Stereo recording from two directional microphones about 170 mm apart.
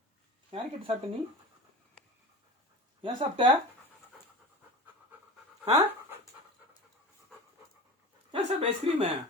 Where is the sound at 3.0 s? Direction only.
30° right (ahead or behind).